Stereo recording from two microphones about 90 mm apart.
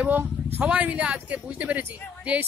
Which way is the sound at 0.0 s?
20° right (ahead or behind).